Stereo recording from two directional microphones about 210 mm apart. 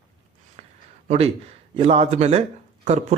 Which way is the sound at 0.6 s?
30° right (ahead or behind).